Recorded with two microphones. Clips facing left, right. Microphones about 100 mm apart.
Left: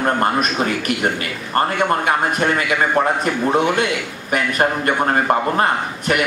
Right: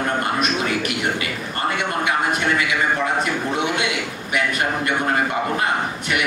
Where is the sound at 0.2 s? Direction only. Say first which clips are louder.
Left 4 dB; 45° left (ahead or behind).